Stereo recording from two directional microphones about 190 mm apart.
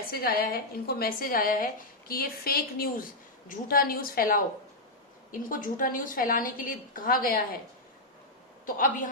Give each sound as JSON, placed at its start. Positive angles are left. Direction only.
{"t": 0.1, "sound": "a woman's voice", "side_deg": 50}
{"t": 8.6, "sound": "a woman's voice", "side_deg": 45}